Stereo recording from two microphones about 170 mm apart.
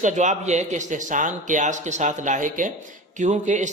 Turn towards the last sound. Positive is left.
turn(degrees=-45)  # may be behind; listen again after turning